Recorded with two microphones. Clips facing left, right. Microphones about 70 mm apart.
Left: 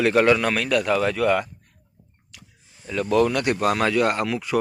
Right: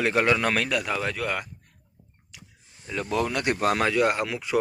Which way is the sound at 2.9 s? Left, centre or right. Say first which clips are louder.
Left 7 dB; centre.